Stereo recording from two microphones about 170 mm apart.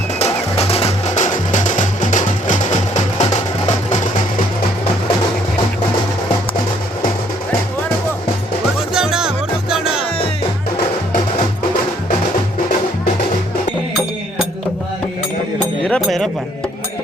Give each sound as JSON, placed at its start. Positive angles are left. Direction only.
{"t": 0.2, "sound": "music", "side_deg": 40}
{"t": 8.9, "sound": "music", "side_deg": -5}
{"t": 15.8, "sound": "music", "side_deg": 5}